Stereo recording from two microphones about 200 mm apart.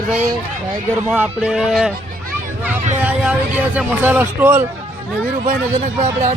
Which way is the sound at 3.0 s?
5° right (ahead or behind).